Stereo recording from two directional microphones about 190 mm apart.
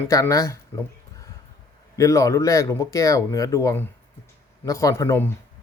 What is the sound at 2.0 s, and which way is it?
Speech, 15° left (ahead or behind).